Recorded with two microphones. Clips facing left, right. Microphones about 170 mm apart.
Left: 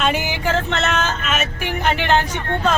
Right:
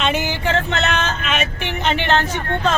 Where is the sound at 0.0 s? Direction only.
10° left (ahead or behind).